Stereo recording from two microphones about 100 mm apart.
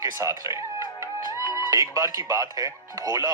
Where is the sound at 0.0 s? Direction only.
35° right (ahead or behind).